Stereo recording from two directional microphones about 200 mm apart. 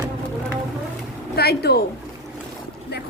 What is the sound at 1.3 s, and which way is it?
Speech, 50° left (ahead or behind).